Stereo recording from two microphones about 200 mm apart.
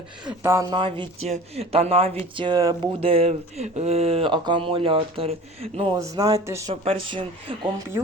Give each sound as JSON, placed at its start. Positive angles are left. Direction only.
{"t": 0.3, "sound": "speech", "side_deg": -15}
{"t": 6.8, "sound": "speech", "side_deg": -25}